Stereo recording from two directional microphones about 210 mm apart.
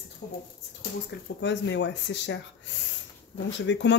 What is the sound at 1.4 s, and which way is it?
A woman's voice, 55° left (ahead or behind).